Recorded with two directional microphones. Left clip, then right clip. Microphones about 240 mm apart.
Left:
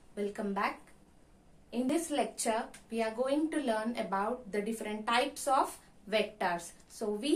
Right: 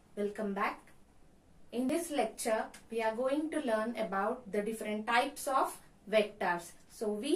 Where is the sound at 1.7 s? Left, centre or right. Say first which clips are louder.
Left 2 dB; centre.